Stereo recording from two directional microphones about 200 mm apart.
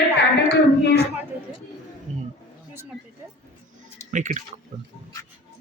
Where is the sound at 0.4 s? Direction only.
55° left (ahead or behind).